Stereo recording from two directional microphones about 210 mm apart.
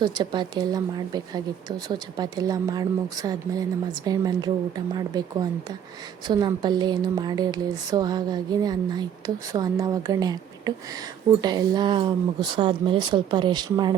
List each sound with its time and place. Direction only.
0.0 s speech: 20° right (ahead or behind)
6.2 s speech: 20° right (ahead or behind)